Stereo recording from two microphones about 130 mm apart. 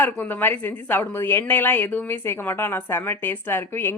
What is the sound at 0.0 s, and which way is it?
A woman's voice, 15° left (ahead or behind).